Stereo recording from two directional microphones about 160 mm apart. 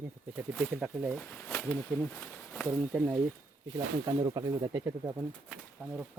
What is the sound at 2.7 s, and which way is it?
Speech, 10° right (ahead or behind).